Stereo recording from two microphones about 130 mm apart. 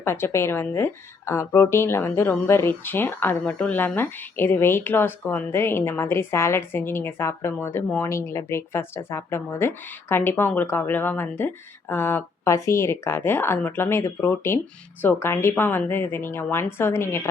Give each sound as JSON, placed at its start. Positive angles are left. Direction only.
{"t": 0.0, "sound": "a woman's voice", "side_deg": 20}